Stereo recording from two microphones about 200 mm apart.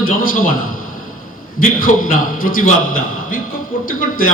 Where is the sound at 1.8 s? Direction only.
45° left (ahead or behind).